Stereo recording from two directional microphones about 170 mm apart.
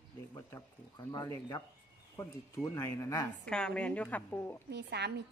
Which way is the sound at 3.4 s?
5° left (ahead or behind).